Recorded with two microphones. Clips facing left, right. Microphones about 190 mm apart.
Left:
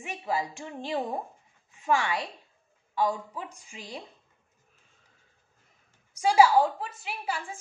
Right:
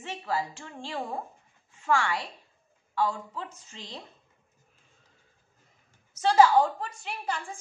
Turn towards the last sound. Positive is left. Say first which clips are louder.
# even
turn(degrees=5)  # may be behind; listen again after turning